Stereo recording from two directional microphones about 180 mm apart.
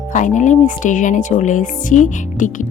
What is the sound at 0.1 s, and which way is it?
Speech, 45° left (ahead or behind).